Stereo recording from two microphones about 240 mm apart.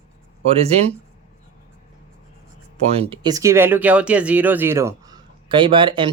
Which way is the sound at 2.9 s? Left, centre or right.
Right.